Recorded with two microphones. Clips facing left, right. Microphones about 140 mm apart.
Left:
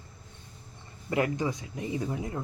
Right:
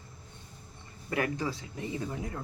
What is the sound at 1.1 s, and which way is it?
Speech, 20° left (ahead or behind).